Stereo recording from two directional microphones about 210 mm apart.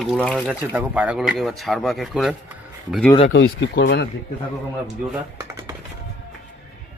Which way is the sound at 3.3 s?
60° left (ahead or behind).